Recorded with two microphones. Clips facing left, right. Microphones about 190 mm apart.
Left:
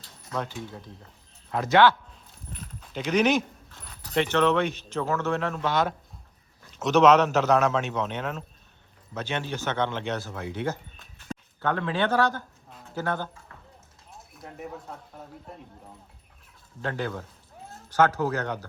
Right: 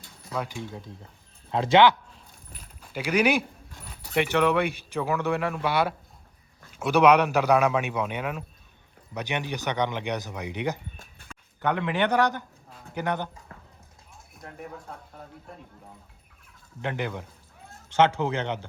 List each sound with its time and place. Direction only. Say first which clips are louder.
1.5 s speech: right 1 dB; 25° right (ahead or behind)
2.5 s a man's voice: left 3 dB; 10° right (ahead or behind)
10.9 s a sound: right 4 dB; 50° right (ahead or behind)
11.6 s a man's voice: right 1 dB; 15° right (ahead or behind)
14.3 s speech: left 1 dB; centre (ahead or behind)
16.8 s a man's voice: even; 15° right (ahead or behind)